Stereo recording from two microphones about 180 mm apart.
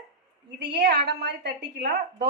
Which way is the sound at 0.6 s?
65° right (ahead or behind).